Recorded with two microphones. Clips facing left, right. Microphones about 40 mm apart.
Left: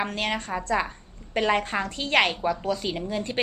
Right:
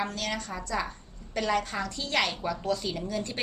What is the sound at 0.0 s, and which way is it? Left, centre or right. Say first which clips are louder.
A woman's voice: left 4 dB; left.